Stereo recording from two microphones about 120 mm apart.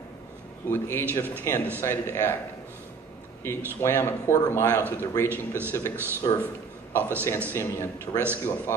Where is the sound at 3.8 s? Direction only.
20° left (ahead or behind).